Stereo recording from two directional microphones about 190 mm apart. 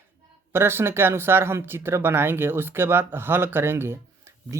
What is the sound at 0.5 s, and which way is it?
Speech, 10° right (ahead or behind).